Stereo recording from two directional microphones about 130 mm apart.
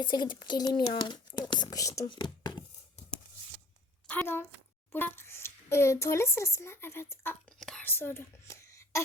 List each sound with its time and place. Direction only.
0.0 s speech: 35° left (ahead or behind)
2.0 s whispering: 35° left (ahead or behind)
4.0 s a woman's voice: 10° left (ahead or behind)
7.6 s whispering: 5° left (ahead or behind)
7.9 s speech: 15° left (ahead or behind)